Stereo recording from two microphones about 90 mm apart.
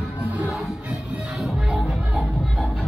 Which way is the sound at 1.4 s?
5° right (ahead or behind).